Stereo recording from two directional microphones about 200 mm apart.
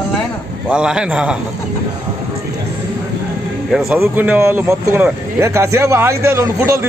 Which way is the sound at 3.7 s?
5° right (ahead or behind).